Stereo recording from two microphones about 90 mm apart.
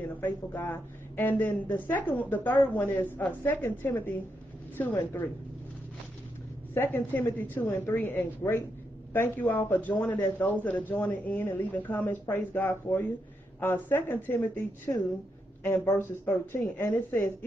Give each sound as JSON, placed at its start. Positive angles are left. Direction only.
{"t": 0.2, "sound": "a woman's voice", "side_deg": 20}
{"t": 6.7, "sound": "a woman's voice", "side_deg": 25}
{"t": 15.6, "sound": "a woman's voice", "side_deg": 30}